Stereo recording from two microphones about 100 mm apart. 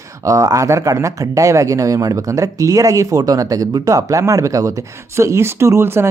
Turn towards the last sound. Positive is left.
turn(degrees=-25)  # may be behind; listen again after turning